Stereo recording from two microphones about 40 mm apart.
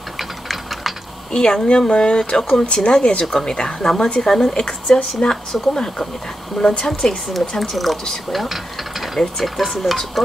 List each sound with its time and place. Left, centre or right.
0.2 s tick: centre
1.3 s speech: left
4.6 s speech: left
6.6 s speech: centre
7.0 s speech: left
7.3 s speech: centre